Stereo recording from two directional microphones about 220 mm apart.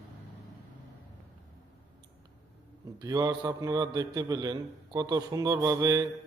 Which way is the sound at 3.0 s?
15° right (ahead or behind).